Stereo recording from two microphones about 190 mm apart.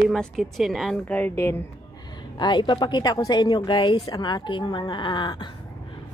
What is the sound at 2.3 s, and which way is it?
A woman's voice, 25° left (ahead or behind).